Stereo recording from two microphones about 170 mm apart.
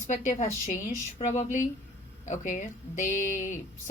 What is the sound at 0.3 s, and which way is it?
Speech, 45° left (ahead or behind).